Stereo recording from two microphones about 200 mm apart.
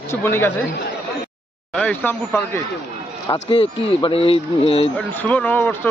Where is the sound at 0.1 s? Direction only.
10° left (ahead or behind).